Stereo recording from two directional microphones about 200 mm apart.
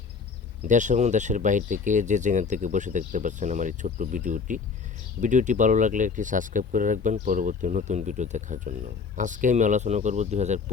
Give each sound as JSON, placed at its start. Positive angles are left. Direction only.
{"t": 0.7, "sound": "speech", "side_deg": -40}